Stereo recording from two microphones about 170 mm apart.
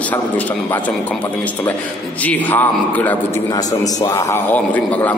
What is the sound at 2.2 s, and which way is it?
A man's voice, 10° left (ahead or behind).